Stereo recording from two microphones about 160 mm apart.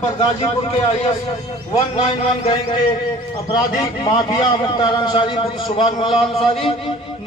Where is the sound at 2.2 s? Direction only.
35° left (ahead or behind).